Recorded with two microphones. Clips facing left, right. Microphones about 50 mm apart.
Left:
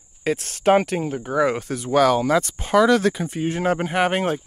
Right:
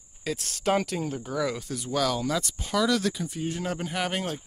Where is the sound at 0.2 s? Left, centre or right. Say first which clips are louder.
Left 8 dB; left.